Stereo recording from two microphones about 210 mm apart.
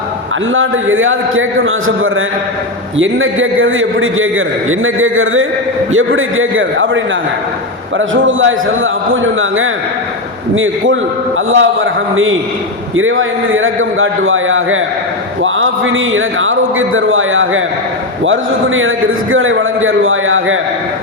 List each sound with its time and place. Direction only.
0.5 s a man's voice: 70° right (ahead or behind)